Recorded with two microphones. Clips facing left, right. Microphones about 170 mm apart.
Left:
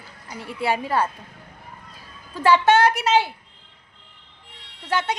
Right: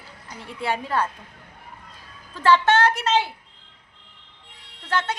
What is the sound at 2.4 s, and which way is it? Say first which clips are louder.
Speech: left 2 dB; 10° left (ahead or behind).